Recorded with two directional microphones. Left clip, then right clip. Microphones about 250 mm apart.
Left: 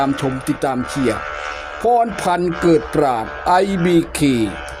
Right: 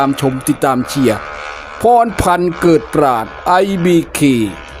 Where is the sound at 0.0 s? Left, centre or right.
Centre.